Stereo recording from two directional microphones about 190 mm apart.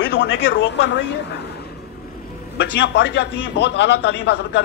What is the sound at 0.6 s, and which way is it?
Speech, 70° left (ahead or behind).